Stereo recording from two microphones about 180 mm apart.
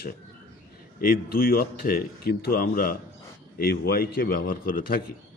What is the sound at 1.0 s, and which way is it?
A man's voice, 55° left (ahead or behind).